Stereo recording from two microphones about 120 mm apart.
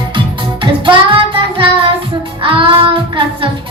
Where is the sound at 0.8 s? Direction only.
45° right (ahead or behind).